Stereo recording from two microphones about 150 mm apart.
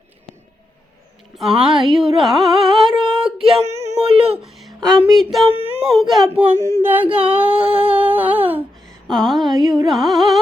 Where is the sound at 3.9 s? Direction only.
40° right (ahead or behind).